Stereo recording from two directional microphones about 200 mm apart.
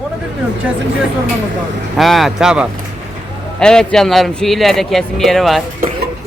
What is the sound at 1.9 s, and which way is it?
A man's voice, centre (ahead or behind).